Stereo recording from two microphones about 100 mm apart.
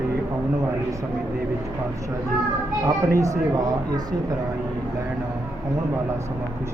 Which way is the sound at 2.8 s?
30° right (ahead or behind).